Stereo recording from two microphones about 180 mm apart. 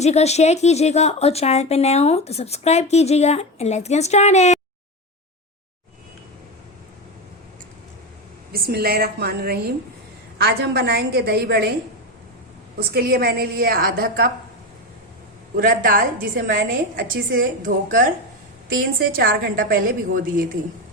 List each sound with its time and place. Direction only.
0.0 s a woman's voice: 35° left (ahead or behind)
8.5 s a woman's voice: 60° right (ahead or behind)
12.9 s a woman's voice: 60° right (ahead or behind)
15.5 s a woman's voice: 50° right (ahead or behind)